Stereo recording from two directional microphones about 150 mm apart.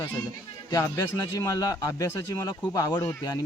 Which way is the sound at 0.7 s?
20° left (ahead or behind).